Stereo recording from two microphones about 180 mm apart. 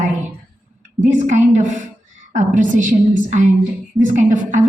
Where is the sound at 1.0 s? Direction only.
40° right (ahead or behind).